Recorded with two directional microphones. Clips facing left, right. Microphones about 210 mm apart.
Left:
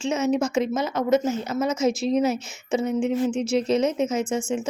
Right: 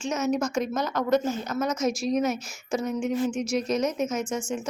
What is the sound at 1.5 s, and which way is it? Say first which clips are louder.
Speech: left 4 dB; 25° left (ahead or behind).